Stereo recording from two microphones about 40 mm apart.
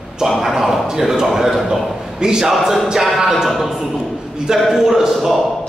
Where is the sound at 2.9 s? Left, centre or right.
Centre.